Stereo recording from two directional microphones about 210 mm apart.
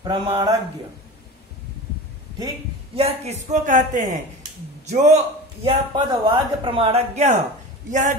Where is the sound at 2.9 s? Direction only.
30° right (ahead or behind).